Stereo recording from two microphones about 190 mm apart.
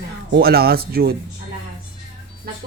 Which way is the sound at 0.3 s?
55° right (ahead or behind).